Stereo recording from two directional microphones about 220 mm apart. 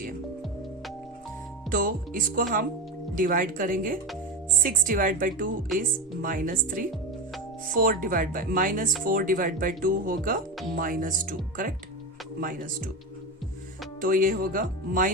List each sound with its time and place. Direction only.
1.7 s speech: 40° right (ahead or behind)
6.2 s speech: 40° right (ahead or behind)
14.0 s speech: 40° right (ahead or behind)